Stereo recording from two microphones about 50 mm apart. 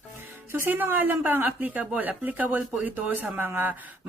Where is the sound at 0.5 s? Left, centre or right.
Right.